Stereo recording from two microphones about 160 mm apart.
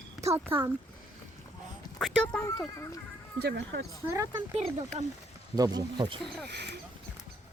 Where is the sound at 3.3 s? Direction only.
90° right.